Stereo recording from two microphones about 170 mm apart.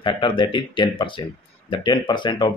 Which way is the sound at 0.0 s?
30° left (ahead or behind).